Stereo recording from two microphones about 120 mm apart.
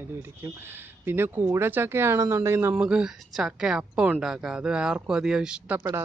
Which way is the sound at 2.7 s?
10° right (ahead or behind).